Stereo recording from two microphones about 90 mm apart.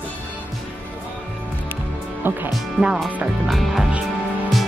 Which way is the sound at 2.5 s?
5° right (ahead or behind).